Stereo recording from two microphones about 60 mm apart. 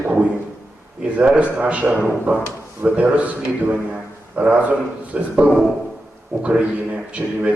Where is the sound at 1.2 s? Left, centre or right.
Centre.